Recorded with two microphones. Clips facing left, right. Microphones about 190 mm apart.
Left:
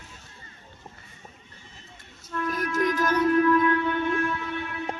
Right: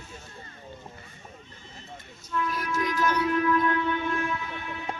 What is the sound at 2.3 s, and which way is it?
Child singing, 45° left (ahead or behind).